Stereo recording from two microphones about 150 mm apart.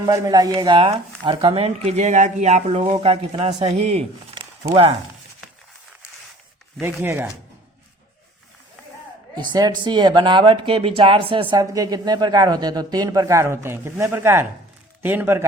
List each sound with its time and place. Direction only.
0.0 s speech: 25° right (ahead or behind); by 4.4 s 40° right (ahead or behind)
6.7 s speech: 15° right (ahead or behind)
9.3 s speech: 30° right (ahead or behind)
11.5 s a woman's voice: 25° right (ahead or behind)